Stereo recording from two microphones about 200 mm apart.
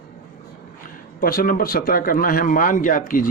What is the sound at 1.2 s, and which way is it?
A man's voice, 45° left (ahead or behind).